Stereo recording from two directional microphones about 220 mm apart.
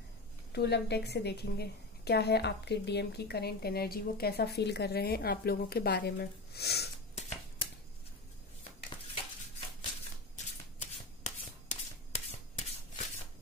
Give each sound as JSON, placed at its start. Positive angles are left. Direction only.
{"t": 0.5, "sound": "a woman's voice", "side_deg": 50}
{"t": 7.2, "sound": "shuffling cards", "side_deg": 30}
{"t": 10.3, "sound": "shuffling cards", "side_deg": 35}